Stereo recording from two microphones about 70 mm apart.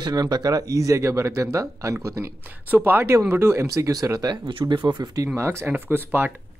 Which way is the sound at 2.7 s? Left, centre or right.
Right.